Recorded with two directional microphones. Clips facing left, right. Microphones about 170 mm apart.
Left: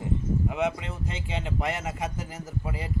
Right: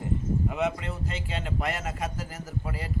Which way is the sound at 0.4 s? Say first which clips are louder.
Even; 10° left (ahead or behind).